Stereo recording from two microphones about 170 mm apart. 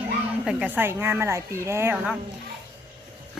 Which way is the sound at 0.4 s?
10° right (ahead or behind).